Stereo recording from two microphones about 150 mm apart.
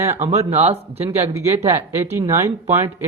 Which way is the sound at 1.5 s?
20° right (ahead or behind).